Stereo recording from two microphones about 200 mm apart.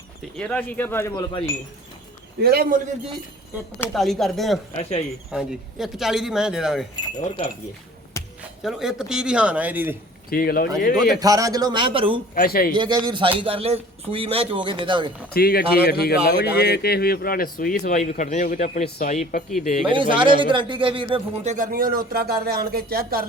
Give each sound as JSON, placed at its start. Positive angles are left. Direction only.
{"t": 0.3, "sound": "speech", "side_deg": 5}
{"t": 2.4, "sound": "speech", "side_deg": -50}
{"t": 3.8, "sound": "speech", "side_deg": 0}
{"t": 4.8, "sound": "speech", "side_deg": 30}
{"t": 5.3, "sound": "speech", "side_deg": 0}
{"t": 7.3, "sound": "speech", "side_deg": 25}
{"t": 8.6, "sound": "speech", "side_deg": 0}
{"t": 10.2, "sound": "speech", "side_deg": 45}
{"t": 11.2, "sound": "a man's voice", "side_deg": -15}
{"t": 12.3, "sound": "speech", "side_deg": 50}
{"t": 12.7, "sound": "a man's voice", "side_deg": -20}
{"t": 15.3, "sound": "speech", "side_deg": 50}
{"t": 19.9, "sound": "a man's voice", "side_deg": -25}
{"t": 21.5, "sound": "speech", "side_deg": -45}